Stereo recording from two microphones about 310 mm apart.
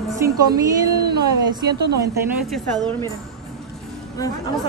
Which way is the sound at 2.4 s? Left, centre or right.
Centre.